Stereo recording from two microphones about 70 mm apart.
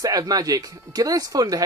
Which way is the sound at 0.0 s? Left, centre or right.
Right.